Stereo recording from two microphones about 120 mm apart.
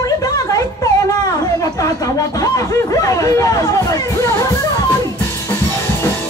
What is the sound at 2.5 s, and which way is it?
Hubbub, 25° left (ahead or behind).